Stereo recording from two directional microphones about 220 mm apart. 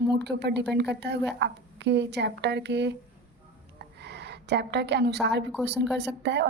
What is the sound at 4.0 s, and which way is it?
A woman's voice, 50° right (ahead or behind).